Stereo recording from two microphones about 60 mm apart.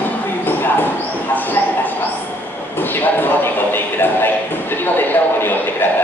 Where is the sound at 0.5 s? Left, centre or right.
Left.